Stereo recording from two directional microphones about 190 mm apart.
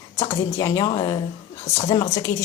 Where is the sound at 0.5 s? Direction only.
20° left (ahead or behind).